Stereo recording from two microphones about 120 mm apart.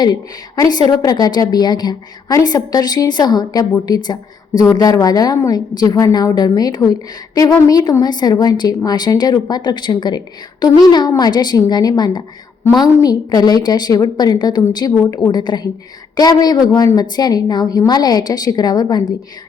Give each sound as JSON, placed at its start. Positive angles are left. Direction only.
{"t": 0.0, "sound": "a woman's voice", "side_deg": 35}